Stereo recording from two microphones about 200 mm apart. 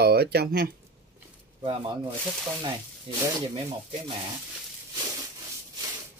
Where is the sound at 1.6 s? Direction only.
25° right (ahead or behind).